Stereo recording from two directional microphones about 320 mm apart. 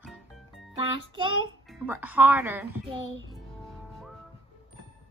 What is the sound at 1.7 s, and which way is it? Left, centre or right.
A woman's voice, centre.